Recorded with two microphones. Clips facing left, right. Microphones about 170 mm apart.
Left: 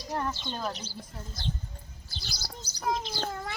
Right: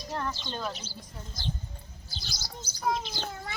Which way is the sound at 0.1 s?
15° left (ahead or behind).